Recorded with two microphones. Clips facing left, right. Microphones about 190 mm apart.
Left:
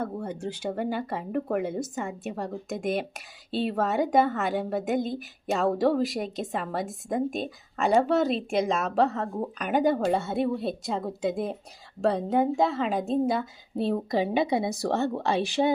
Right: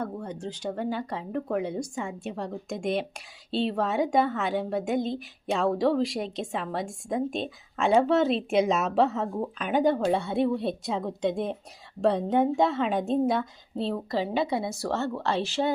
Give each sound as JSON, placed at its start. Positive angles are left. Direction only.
{"t": 0.0, "sound": "a woman's voice", "side_deg": 5}
{"t": 13.7, "sound": "speech", "side_deg": 15}